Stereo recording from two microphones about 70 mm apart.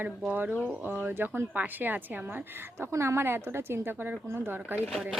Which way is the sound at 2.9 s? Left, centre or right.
Right.